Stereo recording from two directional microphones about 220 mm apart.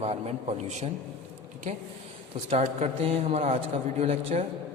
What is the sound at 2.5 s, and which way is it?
Speech, 25° right (ahead or behind).